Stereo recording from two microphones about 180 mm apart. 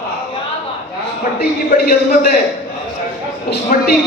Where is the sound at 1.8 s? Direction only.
50° left (ahead or behind).